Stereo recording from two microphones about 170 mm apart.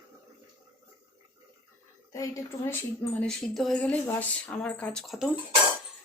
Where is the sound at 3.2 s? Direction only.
5° left (ahead or behind).